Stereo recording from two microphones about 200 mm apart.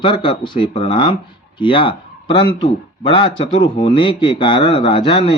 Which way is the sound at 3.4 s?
25° left (ahead or behind).